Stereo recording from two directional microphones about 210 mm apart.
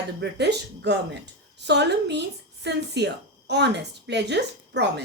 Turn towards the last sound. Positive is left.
turn(degrees=-55)  # may be behind; listen again after turning